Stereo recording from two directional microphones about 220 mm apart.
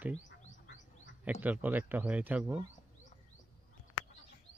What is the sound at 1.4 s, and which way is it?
Speech, 5° right (ahead or behind).